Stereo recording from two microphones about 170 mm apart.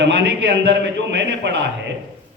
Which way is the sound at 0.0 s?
90° right.